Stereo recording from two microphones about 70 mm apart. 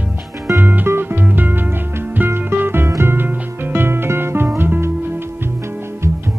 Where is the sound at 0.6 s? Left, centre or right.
Right.